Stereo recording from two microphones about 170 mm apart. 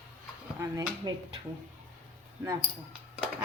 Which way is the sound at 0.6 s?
15° right (ahead or behind).